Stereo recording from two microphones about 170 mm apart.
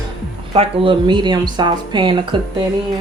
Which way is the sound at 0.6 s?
30° right (ahead or behind).